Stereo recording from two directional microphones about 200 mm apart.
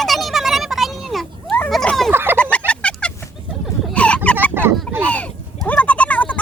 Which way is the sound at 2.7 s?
5° left (ahead or behind).